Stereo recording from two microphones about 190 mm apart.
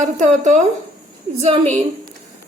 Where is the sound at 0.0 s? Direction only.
40° right (ahead or behind).